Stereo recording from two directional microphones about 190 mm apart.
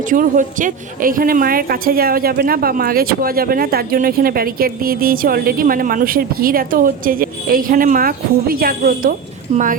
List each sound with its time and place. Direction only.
0.1 s a woman's voice: 45° right (ahead or behind)